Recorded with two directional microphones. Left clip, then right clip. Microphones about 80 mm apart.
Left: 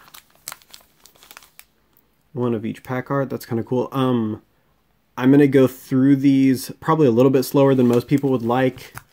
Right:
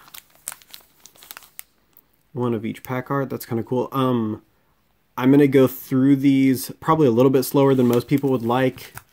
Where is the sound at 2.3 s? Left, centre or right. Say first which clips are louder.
Left 1 dB; centre.